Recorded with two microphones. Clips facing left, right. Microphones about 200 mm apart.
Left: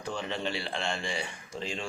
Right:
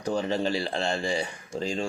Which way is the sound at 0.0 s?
40° right (ahead or behind).